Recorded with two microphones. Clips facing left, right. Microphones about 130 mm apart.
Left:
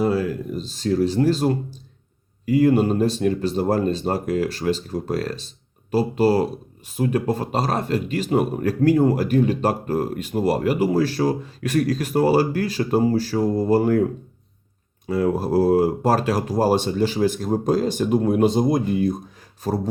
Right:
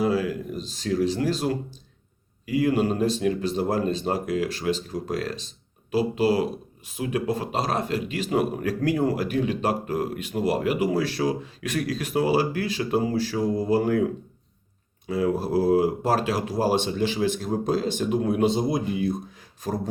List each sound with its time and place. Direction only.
0.0 s speech: 45° left (ahead or behind)
15.0 s speech: 45° left (ahead or behind)